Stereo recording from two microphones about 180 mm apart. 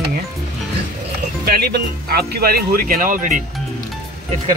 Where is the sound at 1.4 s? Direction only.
60° right (ahead or behind).